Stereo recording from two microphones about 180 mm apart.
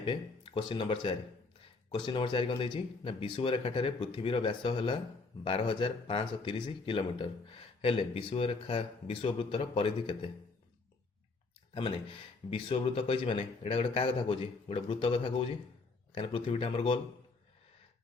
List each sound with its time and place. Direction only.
0.0 s speech: 30° left (ahead or behind)
11.7 s speech: 30° left (ahead or behind)